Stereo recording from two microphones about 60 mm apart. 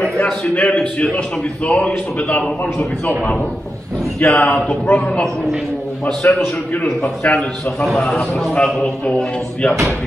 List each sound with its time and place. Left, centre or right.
0.2 s a man's voice: left
4.2 s a man's voice: left
6.2 s a man's voice: left